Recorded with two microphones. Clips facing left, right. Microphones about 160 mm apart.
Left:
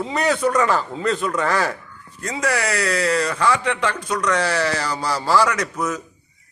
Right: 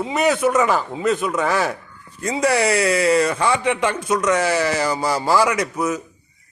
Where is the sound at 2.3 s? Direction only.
25° right (ahead or behind).